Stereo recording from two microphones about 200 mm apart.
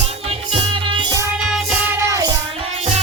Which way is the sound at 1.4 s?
5° right (ahead or behind).